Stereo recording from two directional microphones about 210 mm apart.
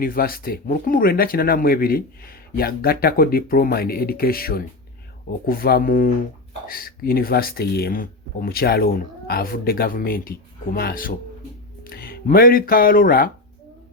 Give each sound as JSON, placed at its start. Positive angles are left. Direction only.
{"t": 0.0, "sound": "speech", "side_deg": 45}